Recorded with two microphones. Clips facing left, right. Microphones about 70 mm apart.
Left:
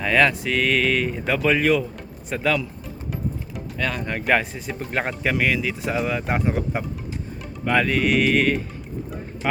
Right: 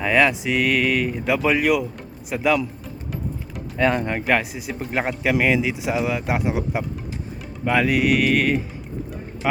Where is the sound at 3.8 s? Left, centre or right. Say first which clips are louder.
Right 7 dB; right.